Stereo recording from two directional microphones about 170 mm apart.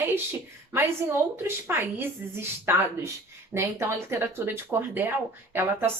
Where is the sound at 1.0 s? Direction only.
15° right (ahead or behind).